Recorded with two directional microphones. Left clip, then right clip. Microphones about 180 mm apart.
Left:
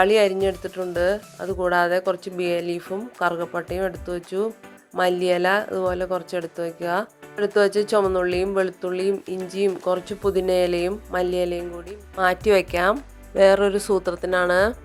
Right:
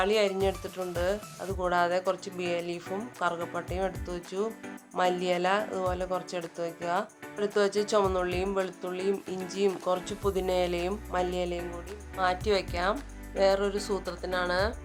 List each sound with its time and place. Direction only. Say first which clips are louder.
0.0 s speech: left 8 dB; 30° left (ahead or behind)